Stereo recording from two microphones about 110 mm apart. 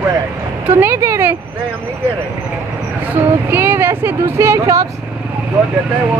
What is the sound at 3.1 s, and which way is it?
Speech, 20° right (ahead or behind).